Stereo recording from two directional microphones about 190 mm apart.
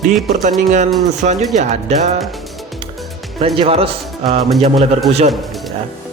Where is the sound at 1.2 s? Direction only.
45° right (ahead or behind).